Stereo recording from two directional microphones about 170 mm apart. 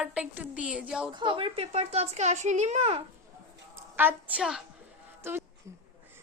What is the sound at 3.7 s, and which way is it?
Speech, 10° right (ahead or behind).